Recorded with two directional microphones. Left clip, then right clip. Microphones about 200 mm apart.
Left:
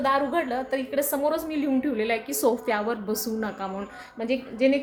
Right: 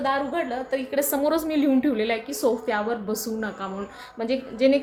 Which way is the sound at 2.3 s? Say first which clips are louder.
Even; 15° left (ahead or behind).